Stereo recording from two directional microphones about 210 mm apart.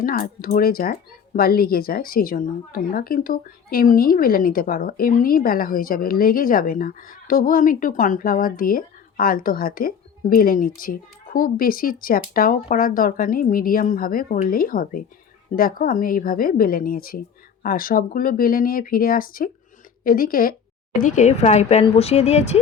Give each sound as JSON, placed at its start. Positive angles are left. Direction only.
{"t": 0.0, "sound": "speech", "side_deg": 45}